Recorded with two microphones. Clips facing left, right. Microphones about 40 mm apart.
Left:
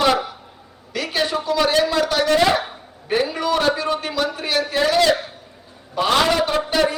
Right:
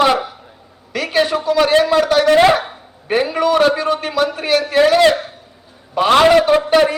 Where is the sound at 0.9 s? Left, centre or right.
Right.